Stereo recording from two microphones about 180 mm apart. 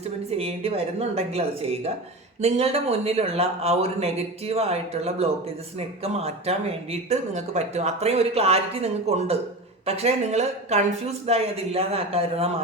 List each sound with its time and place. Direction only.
0.3 s speech: 35° right (ahead or behind)